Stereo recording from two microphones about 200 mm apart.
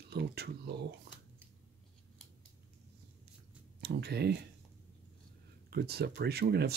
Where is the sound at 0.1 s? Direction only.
55° right (ahead or behind).